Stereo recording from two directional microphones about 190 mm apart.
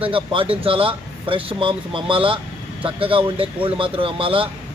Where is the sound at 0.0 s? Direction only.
30° right (ahead or behind).